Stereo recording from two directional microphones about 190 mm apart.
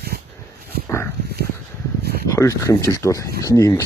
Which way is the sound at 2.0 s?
55° right (ahead or behind).